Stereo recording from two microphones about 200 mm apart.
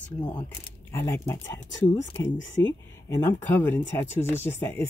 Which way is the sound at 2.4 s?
65° left (ahead or behind).